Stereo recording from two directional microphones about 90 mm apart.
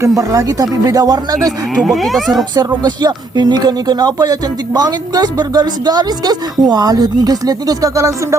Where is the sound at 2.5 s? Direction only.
50° right (ahead or behind).